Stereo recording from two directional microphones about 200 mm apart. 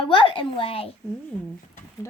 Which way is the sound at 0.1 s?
25° left (ahead or behind).